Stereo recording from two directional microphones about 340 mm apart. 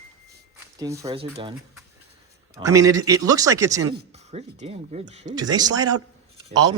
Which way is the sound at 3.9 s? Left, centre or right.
Centre.